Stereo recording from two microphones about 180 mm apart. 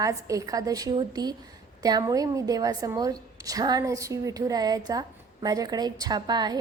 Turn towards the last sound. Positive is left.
turn(degrees=-25)  # may be behind; listen again after turning